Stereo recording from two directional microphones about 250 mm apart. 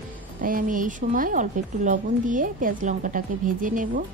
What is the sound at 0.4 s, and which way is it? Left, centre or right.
A woman's voice, right.